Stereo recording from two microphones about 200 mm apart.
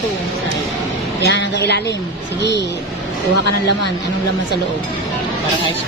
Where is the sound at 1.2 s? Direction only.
60° left (ahead or behind).